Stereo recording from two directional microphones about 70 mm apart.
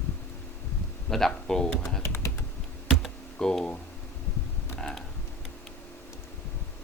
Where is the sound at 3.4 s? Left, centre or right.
Centre.